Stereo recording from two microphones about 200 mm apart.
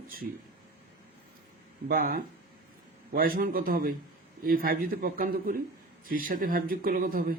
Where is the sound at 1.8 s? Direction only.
45° right (ahead or behind).